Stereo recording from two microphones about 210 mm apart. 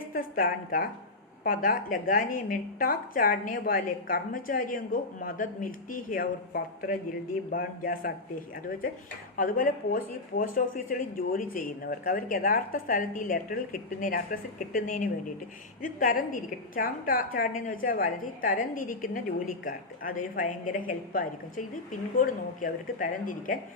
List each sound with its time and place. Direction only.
0.1 s a woman's voice: 45° left (ahead or behind)
9.4 s a woman's voice: 40° left (ahead or behind)